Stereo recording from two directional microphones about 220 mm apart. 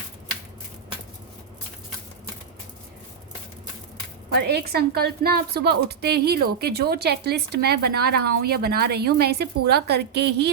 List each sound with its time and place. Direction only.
4.4 s a woman's voice: 45° right (ahead or behind)